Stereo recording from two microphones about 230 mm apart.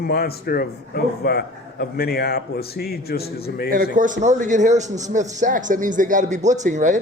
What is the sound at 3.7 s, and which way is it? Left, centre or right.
A man's voice, right.